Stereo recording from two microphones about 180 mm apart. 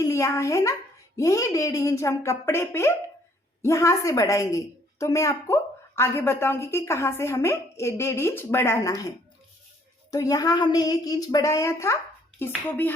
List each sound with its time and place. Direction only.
0.0 s a woman's voice: 15° left (ahead or behind)